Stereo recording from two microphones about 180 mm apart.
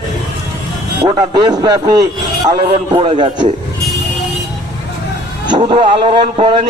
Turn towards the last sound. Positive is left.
turn(degrees=-30)  # may be behind; listen again after turning